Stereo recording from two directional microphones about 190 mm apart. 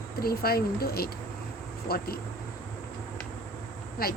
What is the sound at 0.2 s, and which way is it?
A woman's voice, 55° left (ahead or behind).